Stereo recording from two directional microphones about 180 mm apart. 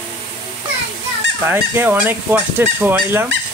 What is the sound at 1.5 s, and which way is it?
Fowl, 10° right (ahead or behind).